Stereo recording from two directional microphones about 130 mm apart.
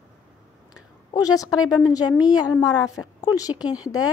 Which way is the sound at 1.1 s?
30° left (ahead or behind).